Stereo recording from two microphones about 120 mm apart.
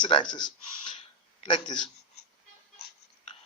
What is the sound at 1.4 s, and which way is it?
Speech, 40° left (ahead or behind).